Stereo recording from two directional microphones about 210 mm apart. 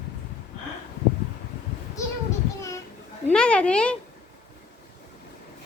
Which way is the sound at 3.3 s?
5° left (ahead or behind).